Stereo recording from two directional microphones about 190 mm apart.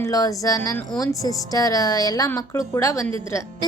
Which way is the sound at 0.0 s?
15° left (ahead or behind).